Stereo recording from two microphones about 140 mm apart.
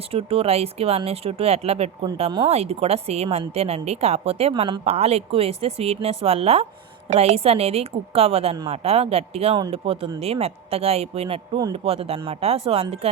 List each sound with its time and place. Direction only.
0.1 s a woman's voice: 45° right (ahead or behind)